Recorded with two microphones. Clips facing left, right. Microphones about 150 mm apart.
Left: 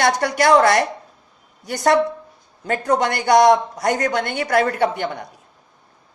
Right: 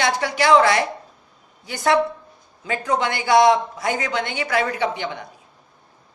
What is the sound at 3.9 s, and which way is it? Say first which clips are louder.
A woman's voice: left 5 dB; 55° left (ahead or behind).